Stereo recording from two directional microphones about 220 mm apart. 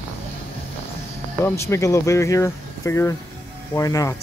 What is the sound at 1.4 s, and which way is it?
Speech, 10° left (ahead or behind).